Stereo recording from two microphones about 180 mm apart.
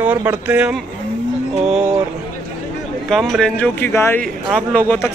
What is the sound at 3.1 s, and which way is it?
A man's voice, centre (ahead or behind).